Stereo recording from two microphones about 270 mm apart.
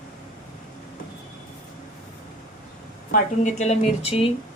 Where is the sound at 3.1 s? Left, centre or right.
Left.